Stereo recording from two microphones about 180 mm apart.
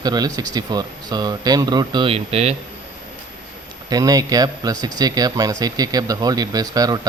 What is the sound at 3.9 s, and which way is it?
Speech, 20° right (ahead or behind).